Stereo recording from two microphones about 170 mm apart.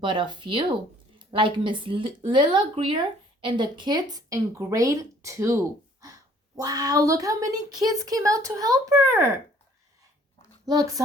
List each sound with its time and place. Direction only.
0.0 s speech: 25° right (ahead or behind)
10.7 s speech: 20° right (ahead or behind)